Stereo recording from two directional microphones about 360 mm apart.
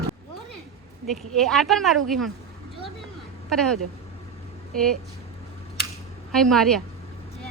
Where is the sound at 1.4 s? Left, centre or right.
Centre.